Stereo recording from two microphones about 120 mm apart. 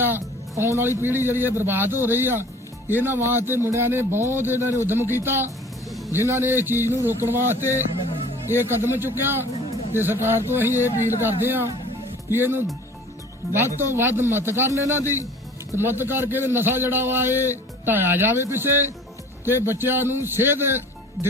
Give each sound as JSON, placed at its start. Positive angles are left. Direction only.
{"t": 0.6, "sound": "a man's voice", "side_deg": -20}
{"t": 13.4, "sound": "speech", "side_deg": 0}
{"t": 13.7, "sound": "a man's voice", "side_deg": -20}